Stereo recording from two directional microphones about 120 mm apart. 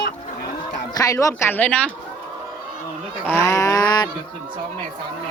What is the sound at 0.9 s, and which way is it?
Speech, 30° left (ahead or behind).